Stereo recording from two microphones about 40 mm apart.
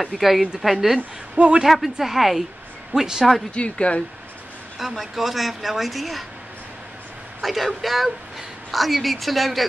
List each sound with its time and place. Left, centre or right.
0.0 s a man's voice: centre
3.5 s speech: left
4.7 s speech: centre
7.4 s speech: centre